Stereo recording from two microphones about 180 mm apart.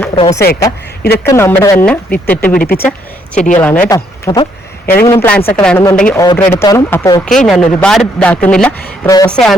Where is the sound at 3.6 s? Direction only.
10° left (ahead or behind).